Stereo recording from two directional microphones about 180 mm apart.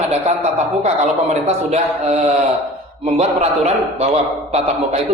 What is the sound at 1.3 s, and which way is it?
Speech, 35° right (ahead or behind).